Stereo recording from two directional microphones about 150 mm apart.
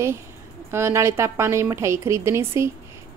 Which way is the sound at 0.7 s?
15° right (ahead or behind).